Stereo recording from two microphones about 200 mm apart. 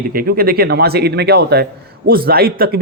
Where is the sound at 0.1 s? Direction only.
45° right (ahead or behind).